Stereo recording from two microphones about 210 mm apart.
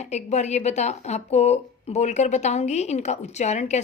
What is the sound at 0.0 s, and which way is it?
Speech, 35° left (ahead or behind).